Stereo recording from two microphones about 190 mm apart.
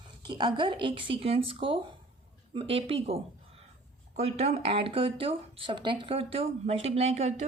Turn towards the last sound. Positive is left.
turn(degrees=-35)  # may be behind; listen again after turning